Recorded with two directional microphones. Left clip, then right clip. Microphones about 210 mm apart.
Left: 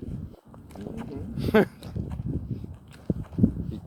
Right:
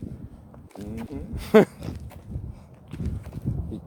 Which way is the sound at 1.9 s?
10° right (ahead or behind).